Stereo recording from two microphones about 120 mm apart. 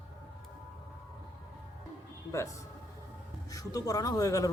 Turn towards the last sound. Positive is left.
turn(degrees=30)  # may be behind; listen again after turning